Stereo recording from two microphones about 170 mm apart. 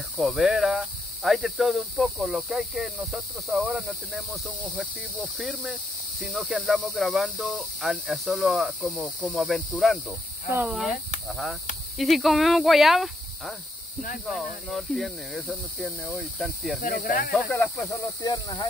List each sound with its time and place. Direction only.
0.2 s speech: centre (ahead or behind)
12.0 s speech: centre (ahead or behind)
16.8 s speech: 55° left (ahead or behind)
17.6 s speech: 20° left (ahead or behind)